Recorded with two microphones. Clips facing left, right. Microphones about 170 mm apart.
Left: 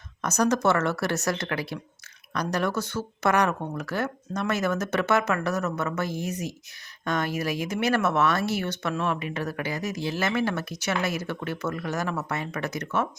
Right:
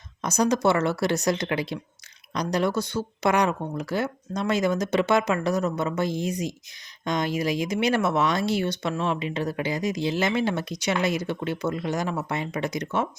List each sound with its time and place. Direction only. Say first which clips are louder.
0.2 s speech: right 1 dB; 10° right (ahead or behind)